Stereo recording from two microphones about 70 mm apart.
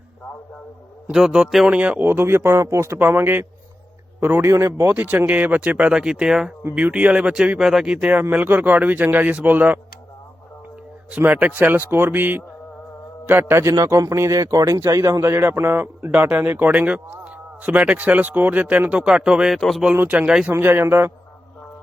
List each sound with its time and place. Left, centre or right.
1.1 s speech: centre
1.6 s speech: centre
2.0 s speech: right
4.4 s speech: right
4.9 s speech: centre
8.4 s a man's voice: right
11.3 s a man's voice: right
13.6 s a man's voice: right; by 19.5 s centre
19.5 s speech: centre
19.9 s a man's voice: right